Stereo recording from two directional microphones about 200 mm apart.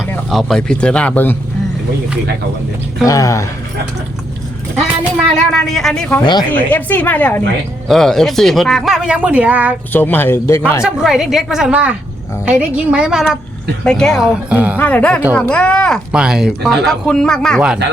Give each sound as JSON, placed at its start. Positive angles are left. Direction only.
{"t": 0.3, "sound": "speech", "side_deg": 0}
{"t": 3.1, "sound": "a woman's voice", "side_deg": 15}
{"t": 4.8, "sound": "a woman's voice", "side_deg": 0}
{"t": 9.9, "sound": "a woman's voice", "side_deg": 10}
{"t": 10.8, "sound": "speech", "side_deg": -5}
{"t": 14.8, "sound": "a woman's voice", "side_deg": 10}